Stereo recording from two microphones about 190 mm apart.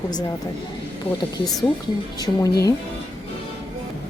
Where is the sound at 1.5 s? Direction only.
Centre (ahead or behind).